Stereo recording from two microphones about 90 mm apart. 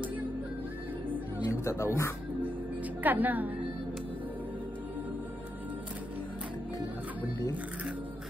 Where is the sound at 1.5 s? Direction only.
30° left (ahead or behind).